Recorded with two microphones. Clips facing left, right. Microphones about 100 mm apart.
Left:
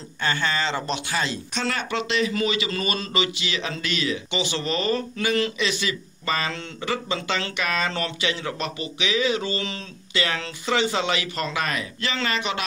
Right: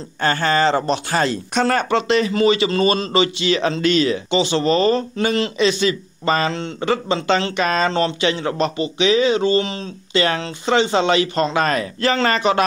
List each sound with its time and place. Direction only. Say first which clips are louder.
0.2 s speech: right 8 dB; 45° right (ahead or behind); by 9.8 s 25° right (ahead or behind)
10.1 s speech: right 7 dB; 40° right (ahead or behind)